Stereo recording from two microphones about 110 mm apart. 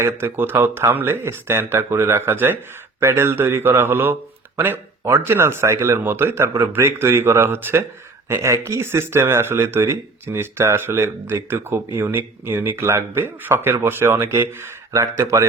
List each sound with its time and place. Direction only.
0.0 s speech: 20° right (ahead or behind)